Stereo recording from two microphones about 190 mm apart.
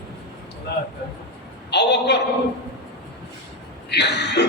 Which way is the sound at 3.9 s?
60° left (ahead or behind).